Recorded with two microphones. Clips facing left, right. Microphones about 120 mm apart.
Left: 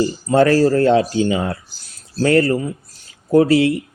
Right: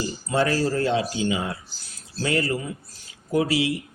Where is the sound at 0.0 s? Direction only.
50° left (ahead or behind).